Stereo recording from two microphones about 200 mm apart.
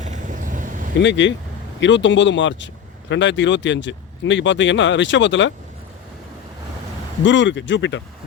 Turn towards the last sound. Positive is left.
turn(degrees=65)  # may be behind; listen again after turning